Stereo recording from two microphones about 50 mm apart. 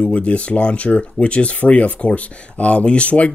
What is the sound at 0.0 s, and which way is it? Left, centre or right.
Speech, left.